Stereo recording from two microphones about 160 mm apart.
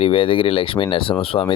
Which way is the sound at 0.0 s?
35° left (ahead or behind).